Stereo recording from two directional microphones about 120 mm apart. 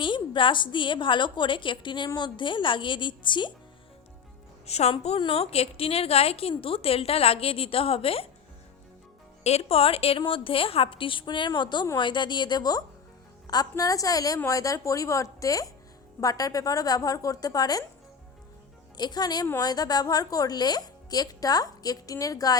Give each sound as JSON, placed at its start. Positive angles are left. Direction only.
{"t": 0.0, "sound": "a woman's voice", "side_deg": 45}
{"t": 4.6, "sound": "a woman's voice", "side_deg": 60}
{"t": 9.4, "sound": "a woman's voice", "side_deg": 60}
{"t": 18.9, "sound": "speech", "side_deg": 35}